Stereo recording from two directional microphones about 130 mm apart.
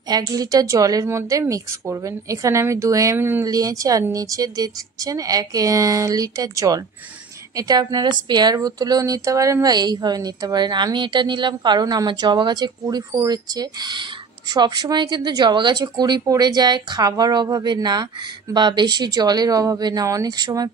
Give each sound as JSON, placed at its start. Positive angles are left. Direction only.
{"t": 0.1, "sound": "a woman's voice", "side_deg": -30}